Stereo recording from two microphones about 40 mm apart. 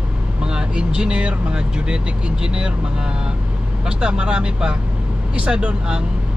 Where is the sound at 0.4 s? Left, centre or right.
Right.